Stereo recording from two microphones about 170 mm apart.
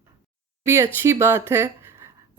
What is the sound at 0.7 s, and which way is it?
Speech, 15° right (ahead or behind).